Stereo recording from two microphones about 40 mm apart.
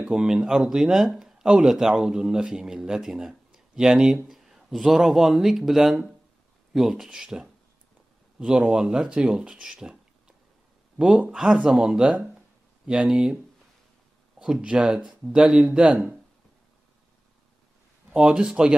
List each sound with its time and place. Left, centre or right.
0.1 s a man's voice: right
1.7 s a man's voice: centre
8.5 s speech: right
11.0 s speech: right
11.7 s a man's voice: centre
14.4 s a sound: centre
14.8 s speech: right
18.1 s speech: right